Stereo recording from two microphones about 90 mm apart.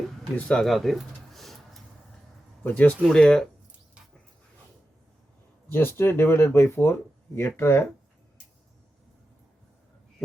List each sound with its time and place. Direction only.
0.3 s a sound: 10° left (ahead or behind)
2.6 s speech: 20° left (ahead or behind)
5.7 s speech: 25° left (ahead or behind)